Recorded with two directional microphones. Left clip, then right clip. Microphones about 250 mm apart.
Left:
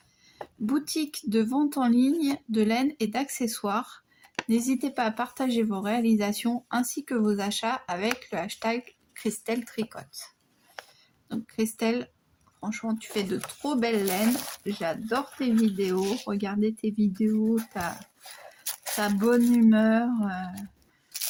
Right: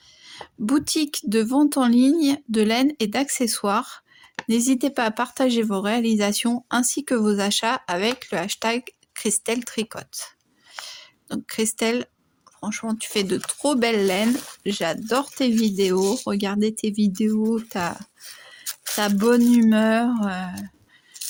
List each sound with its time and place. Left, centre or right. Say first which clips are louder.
0.6 s speech: right 7 dB; right
18.9 s speech: right 5 dB; right